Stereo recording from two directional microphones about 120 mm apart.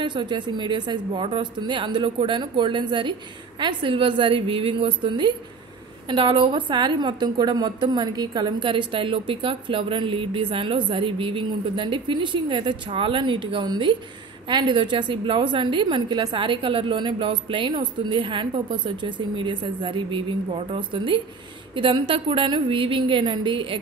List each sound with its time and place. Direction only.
0.0 s a woman's voice: 40° right (ahead or behind)